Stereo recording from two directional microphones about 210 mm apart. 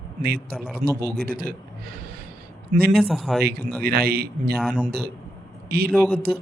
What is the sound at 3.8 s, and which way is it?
Speech, 45° right (ahead or behind).